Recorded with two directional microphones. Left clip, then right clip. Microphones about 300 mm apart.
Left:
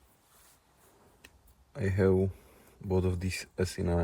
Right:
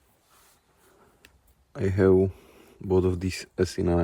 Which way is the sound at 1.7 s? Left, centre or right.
Right.